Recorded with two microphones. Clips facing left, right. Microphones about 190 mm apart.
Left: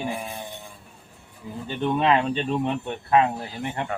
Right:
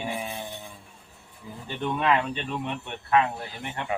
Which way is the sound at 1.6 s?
25° left (ahead or behind).